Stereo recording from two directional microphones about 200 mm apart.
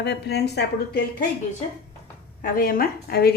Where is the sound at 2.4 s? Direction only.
45° left (ahead or behind).